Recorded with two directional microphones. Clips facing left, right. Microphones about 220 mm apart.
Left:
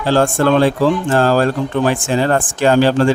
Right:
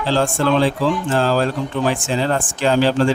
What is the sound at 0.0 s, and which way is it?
Speech, 55° left (ahead or behind).